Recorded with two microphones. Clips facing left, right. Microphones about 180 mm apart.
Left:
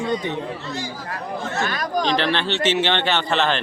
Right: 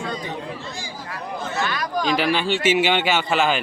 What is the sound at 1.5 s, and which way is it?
Chatter, 45° left (ahead or behind).